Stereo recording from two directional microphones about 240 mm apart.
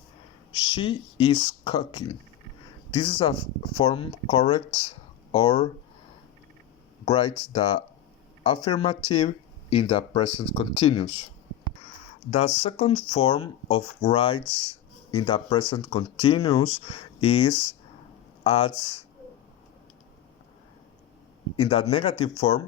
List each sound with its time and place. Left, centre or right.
0.5 s speech: left
7.0 s speech: left
8.4 s speech: left
12.3 s speech: left
21.6 s speech: left